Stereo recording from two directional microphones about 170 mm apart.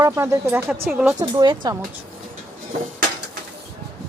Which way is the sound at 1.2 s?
25° right (ahead or behind).